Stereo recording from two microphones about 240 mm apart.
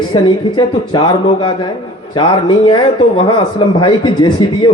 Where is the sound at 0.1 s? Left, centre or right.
Centre.